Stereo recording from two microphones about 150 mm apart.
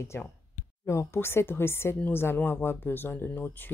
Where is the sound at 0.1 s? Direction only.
15° left (ahead or behind).